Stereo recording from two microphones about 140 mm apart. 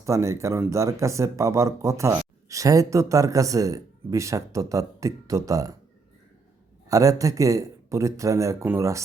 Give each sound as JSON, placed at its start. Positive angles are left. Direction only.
{"t": 0.0, "sound": "speech", "side_deg": -20}
{"t": 6.8, "sound": "speech", "side_deg": -25}